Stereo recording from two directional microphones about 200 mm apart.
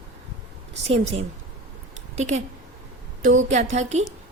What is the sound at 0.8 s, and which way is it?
A woman's voice, 30° right (ahead or behind).